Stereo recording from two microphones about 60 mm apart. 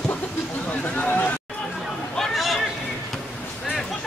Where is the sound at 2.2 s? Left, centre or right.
Centre.